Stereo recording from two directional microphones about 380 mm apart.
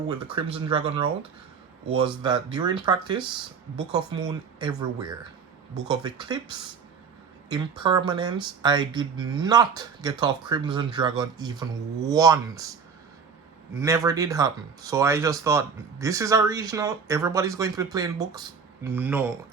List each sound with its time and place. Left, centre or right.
0.1 s speech: centre
7.5 s speech: centre
13.7 s speech: centre